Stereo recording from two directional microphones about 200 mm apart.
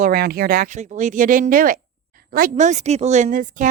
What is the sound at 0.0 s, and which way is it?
A woman's voice, 50° right (ahead or behind).